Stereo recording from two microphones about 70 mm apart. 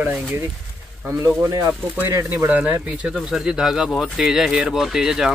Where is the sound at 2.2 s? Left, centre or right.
Right.